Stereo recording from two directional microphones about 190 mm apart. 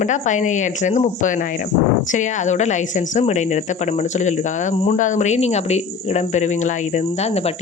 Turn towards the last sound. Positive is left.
turn(degrees=35)  # may be behind; listen again after turning